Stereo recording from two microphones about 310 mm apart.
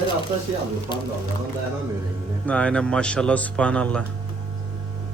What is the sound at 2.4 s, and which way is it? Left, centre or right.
Mantra, centre.